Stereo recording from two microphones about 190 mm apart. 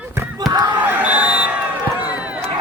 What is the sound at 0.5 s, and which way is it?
Crowd, 25° right (ahead or behind).